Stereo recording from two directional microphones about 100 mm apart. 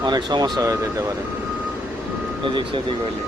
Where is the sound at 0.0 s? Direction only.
45° right (ahead or behind).